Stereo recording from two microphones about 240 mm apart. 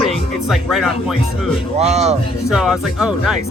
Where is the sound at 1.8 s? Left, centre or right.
Right.